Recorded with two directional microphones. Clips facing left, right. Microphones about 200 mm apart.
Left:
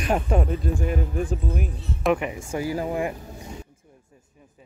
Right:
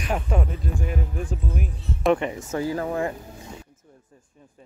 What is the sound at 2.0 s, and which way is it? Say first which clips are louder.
Speech: right 2 dB; 10° left (ahead or behind).